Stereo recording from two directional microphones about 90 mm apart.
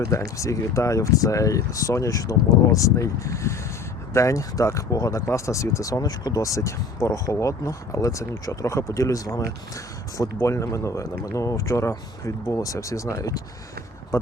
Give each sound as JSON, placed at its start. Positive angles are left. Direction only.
{"t": 0.1, "sound": "speech", "side_deg": 35}